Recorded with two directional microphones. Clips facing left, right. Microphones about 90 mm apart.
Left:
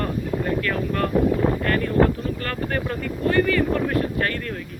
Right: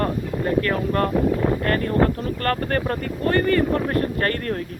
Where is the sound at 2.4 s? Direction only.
50° right (ahead or behind).